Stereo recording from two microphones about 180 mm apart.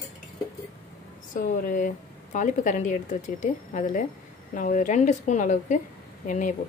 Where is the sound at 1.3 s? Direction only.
45° left (ahead or behind).